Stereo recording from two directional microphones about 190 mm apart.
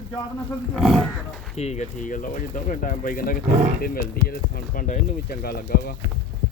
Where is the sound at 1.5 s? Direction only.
35° left (ahead or behind); by 6.0 s 50° left (ahead or behind).